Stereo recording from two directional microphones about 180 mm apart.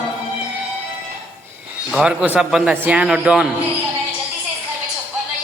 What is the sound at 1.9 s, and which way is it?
A man's voice, 5° right (ahead or behind).